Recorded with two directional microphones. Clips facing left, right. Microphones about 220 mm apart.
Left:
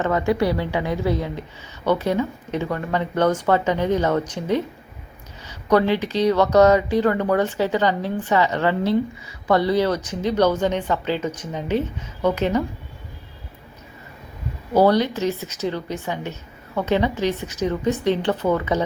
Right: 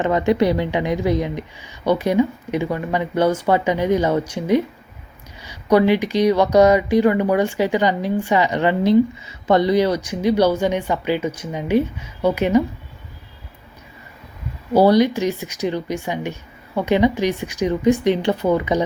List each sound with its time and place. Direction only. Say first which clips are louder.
0.0 s speech: right 3 dB; 20° right (ahead or behind)
14.7 s speech: right 3 dB; 10° right (ahead or behind)